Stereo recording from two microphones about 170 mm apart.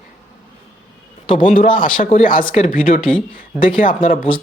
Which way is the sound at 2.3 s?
30° left (ahead or behind).